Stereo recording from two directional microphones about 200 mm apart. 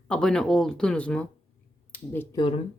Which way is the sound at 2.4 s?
25° left (ahead or behind).